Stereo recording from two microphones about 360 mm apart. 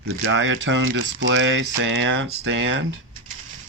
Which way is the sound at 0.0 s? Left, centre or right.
Right.